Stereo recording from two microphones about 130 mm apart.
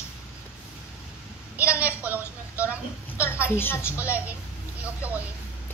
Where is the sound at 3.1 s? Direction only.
20° left (ahead or behind).